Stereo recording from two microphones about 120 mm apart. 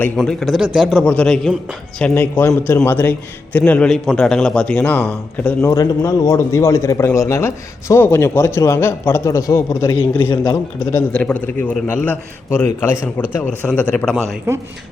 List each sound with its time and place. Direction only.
0.2 s speech: centre (ahead or behind)
1.0 s a man's voice: 10° left (ahead or behind)
5.6 s a man's voice: 25° left (ahead or behind)
10.4 s a man's voice: 30° left (ahead or behind)
11.1 s a man's voice: 10° left (ahead or behind)
14.5 s speech: 20° right (ahead or behind)